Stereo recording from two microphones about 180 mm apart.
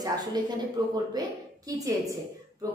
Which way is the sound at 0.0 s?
20° right (ahead or behind).